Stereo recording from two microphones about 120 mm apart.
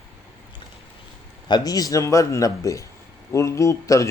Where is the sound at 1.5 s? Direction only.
35° left (ahead or behind).